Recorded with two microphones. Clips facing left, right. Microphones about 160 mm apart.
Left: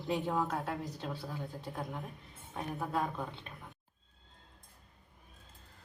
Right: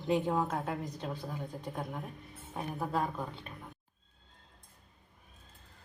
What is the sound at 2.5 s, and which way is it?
Speech, 5° right (ahead or behind).